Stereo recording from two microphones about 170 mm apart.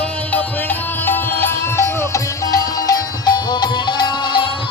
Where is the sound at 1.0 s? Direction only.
10° left (ahead or behind).